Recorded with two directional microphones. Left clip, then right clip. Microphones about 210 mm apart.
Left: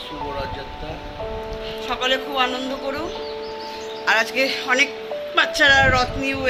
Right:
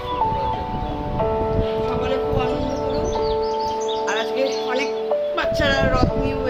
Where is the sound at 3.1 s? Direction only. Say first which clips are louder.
Right 9 dB; 35° right (ahead or behind).